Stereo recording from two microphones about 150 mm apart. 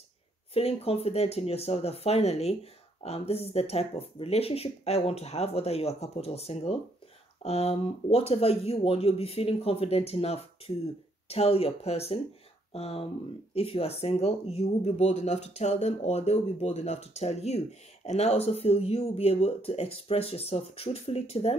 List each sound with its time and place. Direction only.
0.6 s speech: 40° left (ahead or behind)